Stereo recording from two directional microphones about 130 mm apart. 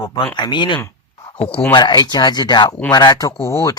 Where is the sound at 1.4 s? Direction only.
45° left (ahead or behind).